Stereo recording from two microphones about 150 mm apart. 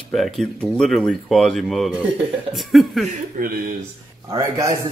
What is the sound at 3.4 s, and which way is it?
Speech, 65° right (ahead or behind).